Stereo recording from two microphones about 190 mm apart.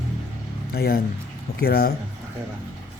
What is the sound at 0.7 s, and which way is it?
Speech, 55° left (ahead or behind).